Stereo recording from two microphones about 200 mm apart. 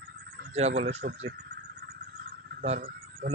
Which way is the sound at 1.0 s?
45° right (ahead or behind).